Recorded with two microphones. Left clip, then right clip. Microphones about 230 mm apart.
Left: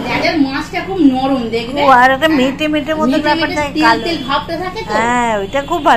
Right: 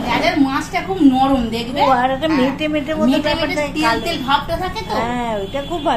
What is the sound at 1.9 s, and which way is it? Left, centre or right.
Speech, centre.